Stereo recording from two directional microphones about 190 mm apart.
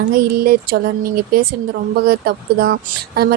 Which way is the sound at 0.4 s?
50° right (ahead or behind).